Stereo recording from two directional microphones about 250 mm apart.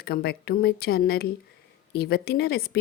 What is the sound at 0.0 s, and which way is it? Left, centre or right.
Speech, left.